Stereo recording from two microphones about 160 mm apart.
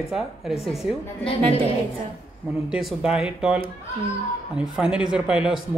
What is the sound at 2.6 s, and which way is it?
Speech, 5° right (ahead or behind).